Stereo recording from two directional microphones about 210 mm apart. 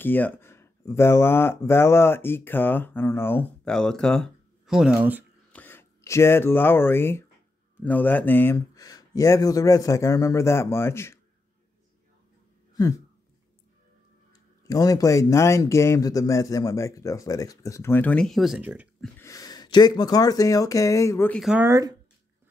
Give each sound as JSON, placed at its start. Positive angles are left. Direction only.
{"t": 0.0, "sound": "speech", "side_deg": 10}
{"t": 5.5, "sound": "speech", "side_deg": 10}
{"t": 12.7, "sound": "a sound", "side_deg": 15}
{"t": 14.7, "sound": "speech", "side_deg": 15}
{"t": 19.1, "sound": "speech", "side_deg": 15}
{"t": 21.4, "sound": "speech", "side_deg": -5}